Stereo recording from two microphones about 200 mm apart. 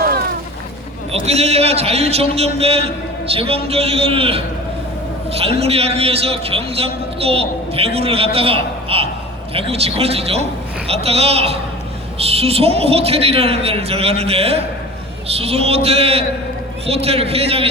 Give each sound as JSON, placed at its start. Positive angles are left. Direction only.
{"t": 1.1, "sound": "a man's voice", "side_deg": -30}